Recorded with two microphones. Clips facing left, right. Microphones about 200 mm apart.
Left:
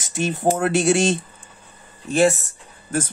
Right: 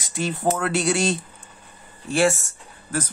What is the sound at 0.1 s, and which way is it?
Speech, 25° left (ahead or behind).